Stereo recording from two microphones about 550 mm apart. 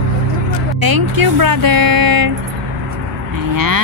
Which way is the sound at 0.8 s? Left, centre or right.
Right.